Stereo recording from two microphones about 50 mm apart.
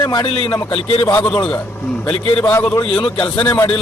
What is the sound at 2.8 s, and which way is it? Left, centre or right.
Speech, left.